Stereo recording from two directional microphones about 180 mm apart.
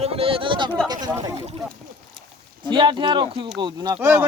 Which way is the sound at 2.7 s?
25° right (ahead or behind).